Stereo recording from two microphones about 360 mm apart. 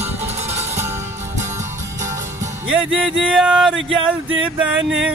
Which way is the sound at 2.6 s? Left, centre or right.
Centre.